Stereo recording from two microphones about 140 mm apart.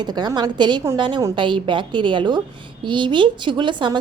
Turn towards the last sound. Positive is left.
turn(degrees=-35)  # may be behind; listen again after turning